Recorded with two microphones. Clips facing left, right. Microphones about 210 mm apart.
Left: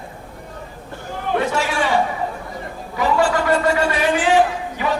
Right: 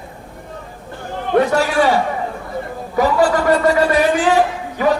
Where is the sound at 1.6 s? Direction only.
40° right (ahead or behind).